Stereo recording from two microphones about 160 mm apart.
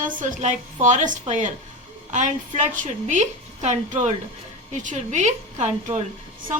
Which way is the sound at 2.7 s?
55° right (ahead or behind).